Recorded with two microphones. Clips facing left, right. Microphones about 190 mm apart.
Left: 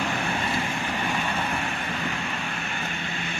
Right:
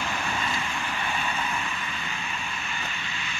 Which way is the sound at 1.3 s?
65° left (ahead or behind).